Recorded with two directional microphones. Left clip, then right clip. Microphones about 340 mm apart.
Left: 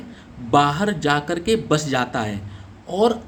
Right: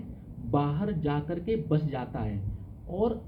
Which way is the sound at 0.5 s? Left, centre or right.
Left.